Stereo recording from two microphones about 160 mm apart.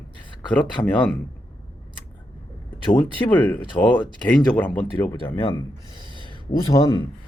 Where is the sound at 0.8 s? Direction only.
25° left (ahead or behind).